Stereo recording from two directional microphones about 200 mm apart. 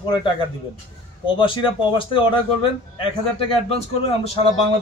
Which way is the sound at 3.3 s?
25° left (ahead or behind).